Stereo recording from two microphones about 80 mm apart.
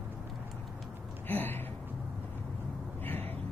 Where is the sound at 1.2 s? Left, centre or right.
Left.